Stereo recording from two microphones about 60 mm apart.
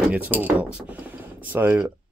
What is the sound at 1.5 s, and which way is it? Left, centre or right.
Speech, right.